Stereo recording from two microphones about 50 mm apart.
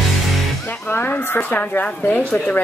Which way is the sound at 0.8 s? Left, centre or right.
Left.